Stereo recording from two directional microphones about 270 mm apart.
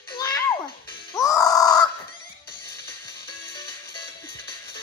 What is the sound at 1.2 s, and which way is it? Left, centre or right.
Grunt, centre.